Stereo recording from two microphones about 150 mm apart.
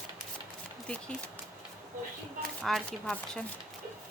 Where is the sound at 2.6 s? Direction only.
5° left (ahead or behind).